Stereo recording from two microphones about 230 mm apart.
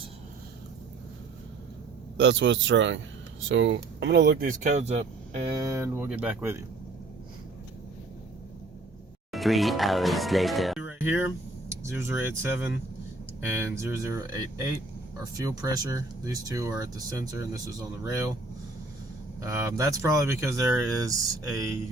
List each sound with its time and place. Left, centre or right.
2.1 s speech: right; by 6.6 s centre
9.3 s speech: centre
19.4 s speech: centre